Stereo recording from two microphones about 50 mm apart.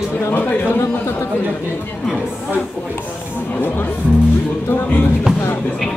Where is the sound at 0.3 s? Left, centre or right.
Left.